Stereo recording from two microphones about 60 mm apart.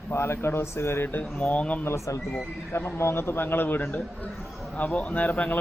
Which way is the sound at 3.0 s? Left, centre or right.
Left.